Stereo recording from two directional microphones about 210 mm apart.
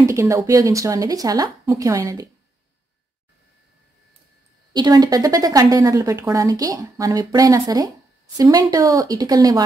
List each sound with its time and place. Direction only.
0.0 s speech: 15° right (ahead or behind)
4.7 s speech: 20° right (ahead or behind)